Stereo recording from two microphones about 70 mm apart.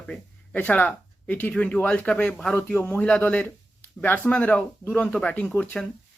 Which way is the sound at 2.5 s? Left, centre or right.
Left.